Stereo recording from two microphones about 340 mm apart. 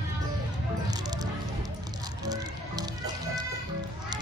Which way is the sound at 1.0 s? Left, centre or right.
Centre.